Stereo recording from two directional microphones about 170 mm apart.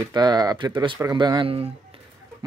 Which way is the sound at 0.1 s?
25° right (ahead or behind).